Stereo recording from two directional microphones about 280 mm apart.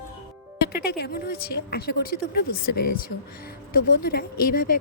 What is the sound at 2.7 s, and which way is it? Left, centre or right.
Speech, left.